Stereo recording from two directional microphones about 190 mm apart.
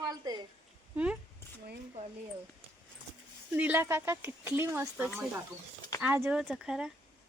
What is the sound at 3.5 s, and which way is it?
Speech, 10° right (ahead or behind).